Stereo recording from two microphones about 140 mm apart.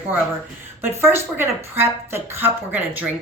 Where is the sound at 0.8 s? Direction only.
15° right (ahead or behind).